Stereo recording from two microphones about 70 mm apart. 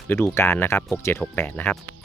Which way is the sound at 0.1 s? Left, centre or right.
Left.